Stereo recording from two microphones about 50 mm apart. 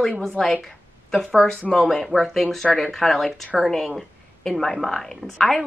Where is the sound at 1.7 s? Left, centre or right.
Centre.